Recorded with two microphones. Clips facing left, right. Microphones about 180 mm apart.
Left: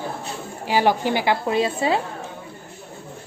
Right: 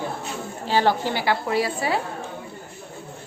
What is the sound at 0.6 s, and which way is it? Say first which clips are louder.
A woman's voice: left 2 dB; 15° left (ahead or behind).